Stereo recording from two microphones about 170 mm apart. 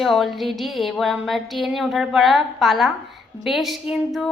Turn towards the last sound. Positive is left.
turn(degrees=0)  # may be behind; listen again after turning